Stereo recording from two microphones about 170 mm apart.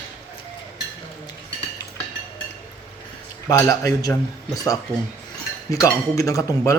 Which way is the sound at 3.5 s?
20° left (ahead or behind).